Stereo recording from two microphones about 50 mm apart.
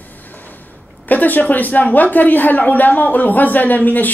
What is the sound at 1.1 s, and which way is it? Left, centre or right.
A woman's voice, left.